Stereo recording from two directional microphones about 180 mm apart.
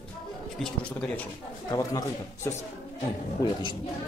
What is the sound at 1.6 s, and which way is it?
Speech, 20° left (ahead or behind).